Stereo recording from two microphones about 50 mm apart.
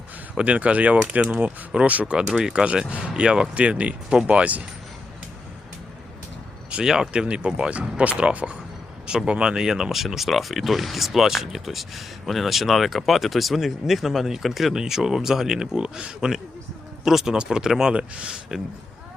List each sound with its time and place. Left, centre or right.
0.3 s speech: right
6.8 s speech: centre
7.1 s speech: right
17.9 s speech: right